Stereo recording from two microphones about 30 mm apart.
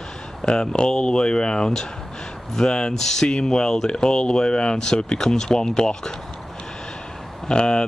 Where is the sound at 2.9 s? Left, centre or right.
Centre.